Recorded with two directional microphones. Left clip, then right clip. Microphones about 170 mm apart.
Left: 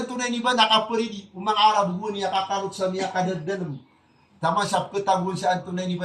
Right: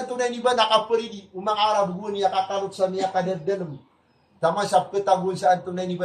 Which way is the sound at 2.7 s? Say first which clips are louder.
Right 3 dB; 20° right (ahead or behind).